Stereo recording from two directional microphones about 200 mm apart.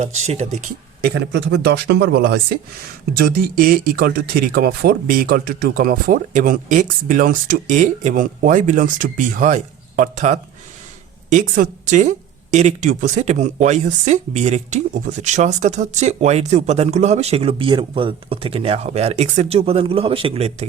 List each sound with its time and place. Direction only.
0.0 s speech: 35° right (ahead or behind)
1.0 s speech: 60° right (ahead or behind); by 20.7 s 30° right (ahead or behind)